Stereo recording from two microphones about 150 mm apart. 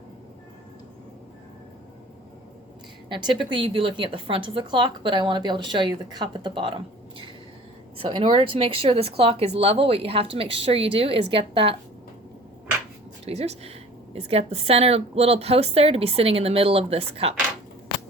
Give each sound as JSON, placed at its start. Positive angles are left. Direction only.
{"t": 3.1, "sound": "a woman's voice", "side_deg": -30}
{"t": 13.2, "sound": "a woman's voice", "side_deg": -45}